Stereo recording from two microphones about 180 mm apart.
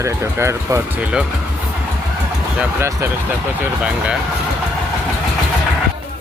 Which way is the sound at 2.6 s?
15° right (ahead or behind).